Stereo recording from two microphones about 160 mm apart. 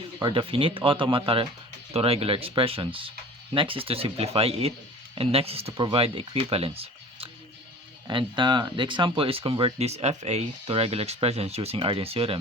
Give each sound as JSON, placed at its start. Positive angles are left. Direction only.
{"t": 0.2, "sound": "speech", "side_deg": -30}